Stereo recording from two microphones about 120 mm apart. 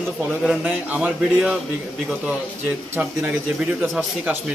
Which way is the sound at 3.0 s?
10° right (ahead or behind).